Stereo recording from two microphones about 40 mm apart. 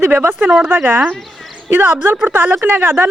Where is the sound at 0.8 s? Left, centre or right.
Right.